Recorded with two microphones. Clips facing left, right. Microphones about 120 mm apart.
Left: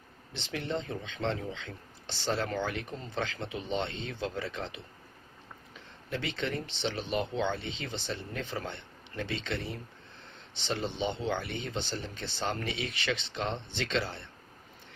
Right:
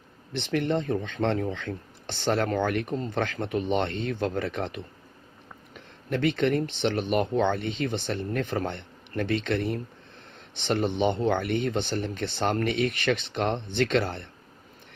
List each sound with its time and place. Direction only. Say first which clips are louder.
0.3 s speech: right 8 dB; 60° right (ahead or behind)